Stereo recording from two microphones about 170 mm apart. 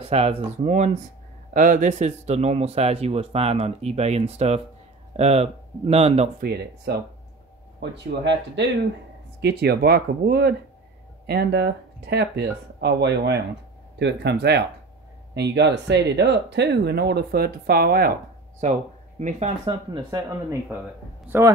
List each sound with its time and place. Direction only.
0.0 s speech: 35° right (ahead or behind)
7.8 s speech: 90° right
9.4 s speech: 70° right (ahead or behind)
18.6 s speech: 45° right (ahead or behind)
20.1 s speech: 20° right (ahead or behind)